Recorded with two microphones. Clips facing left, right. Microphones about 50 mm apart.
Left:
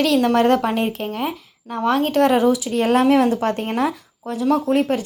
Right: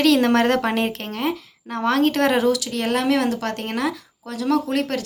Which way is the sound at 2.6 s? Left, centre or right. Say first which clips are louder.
Left 5 dB; left.